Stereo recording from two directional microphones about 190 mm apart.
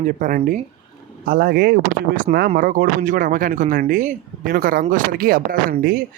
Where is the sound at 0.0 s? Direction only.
45° right (ahead or behind).